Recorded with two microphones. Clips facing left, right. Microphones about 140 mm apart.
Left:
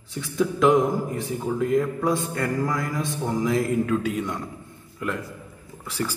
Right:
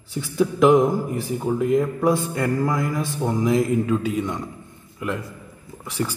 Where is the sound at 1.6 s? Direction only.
20° right (ahead or behind).